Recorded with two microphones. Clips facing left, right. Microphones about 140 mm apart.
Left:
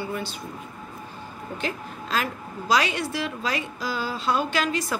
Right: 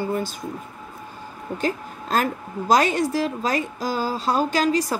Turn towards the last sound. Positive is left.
turn(degrees=-35)  # may be behind; listen again after turning